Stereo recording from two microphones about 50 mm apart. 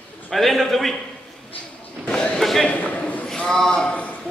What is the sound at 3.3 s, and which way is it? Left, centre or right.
Speech, centre.